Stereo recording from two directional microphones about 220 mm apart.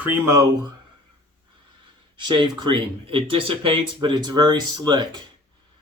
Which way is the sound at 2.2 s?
20° right (ahead or behind).